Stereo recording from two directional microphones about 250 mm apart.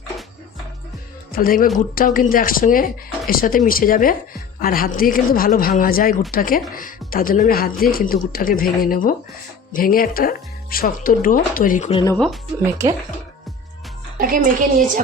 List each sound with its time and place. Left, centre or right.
1.3 s speech: left
12.1 s speech: centre
14.2 s a woman's voice: right